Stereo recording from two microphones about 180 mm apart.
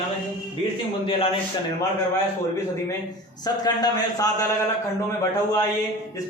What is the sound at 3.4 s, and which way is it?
A man's voice, 20° left (ahead or behind).